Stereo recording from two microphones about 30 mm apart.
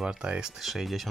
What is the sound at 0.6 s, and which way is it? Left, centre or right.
Speech, centre.